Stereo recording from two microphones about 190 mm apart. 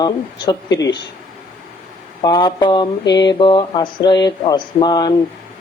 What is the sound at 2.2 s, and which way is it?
Speech, 25° left (ahead or behind).